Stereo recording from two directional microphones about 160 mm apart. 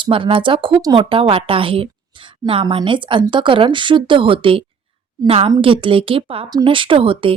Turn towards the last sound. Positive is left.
turn(degrees=-35)  # may be behind; listen again after turning